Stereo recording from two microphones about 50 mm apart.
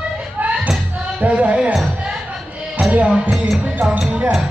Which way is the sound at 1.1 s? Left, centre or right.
Right.